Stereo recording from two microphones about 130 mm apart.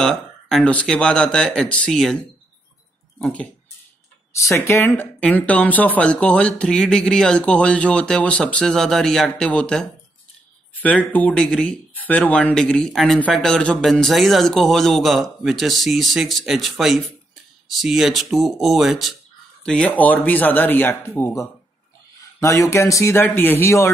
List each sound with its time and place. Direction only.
0.0 s speech: 5° left (ahead or behind)
4.5 s speech: 20° left (ahead or behind)